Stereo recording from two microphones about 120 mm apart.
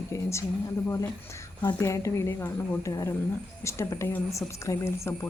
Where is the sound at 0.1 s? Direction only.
25° left (ahead or behind).